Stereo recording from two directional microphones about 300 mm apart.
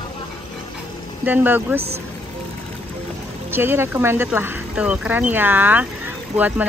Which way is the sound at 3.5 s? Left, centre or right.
Centre.